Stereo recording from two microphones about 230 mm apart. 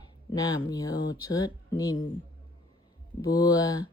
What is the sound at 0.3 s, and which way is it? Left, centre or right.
Speech, centre.